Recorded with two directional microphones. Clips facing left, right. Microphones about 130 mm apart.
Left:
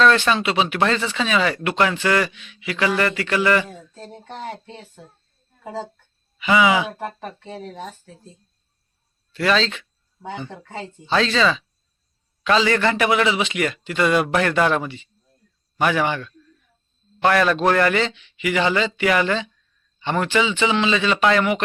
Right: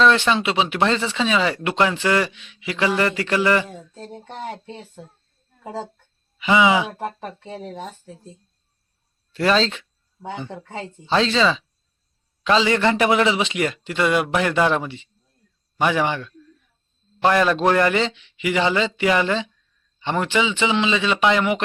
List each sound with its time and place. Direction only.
0.0 s a man's voice: 20° right (ahead or behind)
3.7 s a sound: 15° right (ahead or behind)
4.1 s speech: 15° right (ahead or behind)
6.4 s a man's voice: 25° right (ahead or behind)
9.3 s speech: 35° right (ahead or behind)
10.2 s speech: centre (ahead or behind)
11.1 s a man's voice: 25° right (ahead or behind)
14.0 s a man's voice: 15° right (ahead or behind)